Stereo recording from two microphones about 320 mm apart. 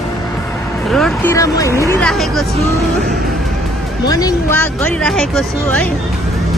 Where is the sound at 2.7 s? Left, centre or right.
Centre.